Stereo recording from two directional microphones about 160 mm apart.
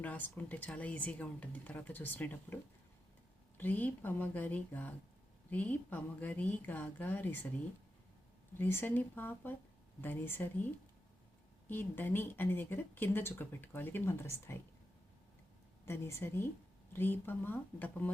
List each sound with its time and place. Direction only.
0.0 s speech: 10° left (ahead or behind)
3.6 s speech: 10° left (ahead or behind)
8.5 s speech: 15° left (ahead or behind)
11.7 s speech: 15° left (ahead or behind)
15.9 s speech: 15° left (ahead or behind)